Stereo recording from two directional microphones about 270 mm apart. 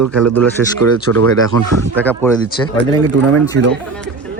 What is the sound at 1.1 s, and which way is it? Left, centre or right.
Speech, right.